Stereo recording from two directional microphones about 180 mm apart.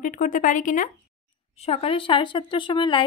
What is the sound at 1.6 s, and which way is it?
A woman's voice, 35° left (ahead or behind).